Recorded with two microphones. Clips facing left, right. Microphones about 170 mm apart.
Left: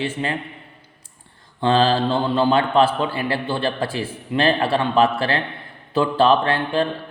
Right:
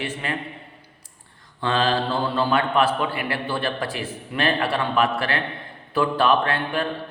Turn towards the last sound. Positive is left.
turn(degrees=30)  # may be behind; listen again after turning